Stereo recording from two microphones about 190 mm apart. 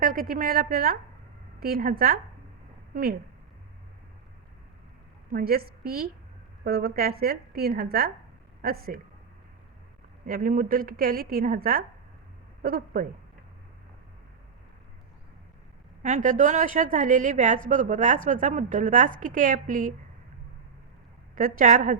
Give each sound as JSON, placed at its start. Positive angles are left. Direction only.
{"t": 0.0, "sound": "a woman's voice", "side_deg": -45}
{"t": 5.3, "sound": "a woman's voice", "side_deg": -50}
{"t": 10.2, "sound": "a woman's voice", "side_deg": -45}
{"t": 16.0, "sound": "a woman's voice", "side_deg": -40}
{"t": 21.3, "sound": "a woman's voice", "side_deg": -45}